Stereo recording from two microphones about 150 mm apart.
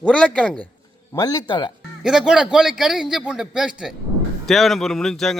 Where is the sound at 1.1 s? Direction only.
25° left (ahead or behind).